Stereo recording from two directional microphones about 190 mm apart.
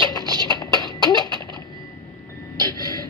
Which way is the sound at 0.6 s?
20° left (ahead or behind).